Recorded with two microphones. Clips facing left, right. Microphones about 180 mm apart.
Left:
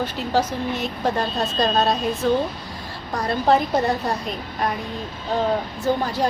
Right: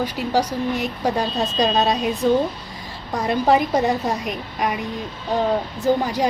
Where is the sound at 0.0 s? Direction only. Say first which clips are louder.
Right 1 dB; 15° right (ahead or behind).